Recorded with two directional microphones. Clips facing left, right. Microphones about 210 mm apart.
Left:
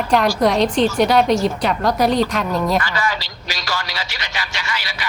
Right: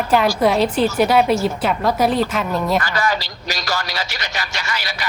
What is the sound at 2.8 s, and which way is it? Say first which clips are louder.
A man's voice: right 2 dB; 40° right (ahead or behind).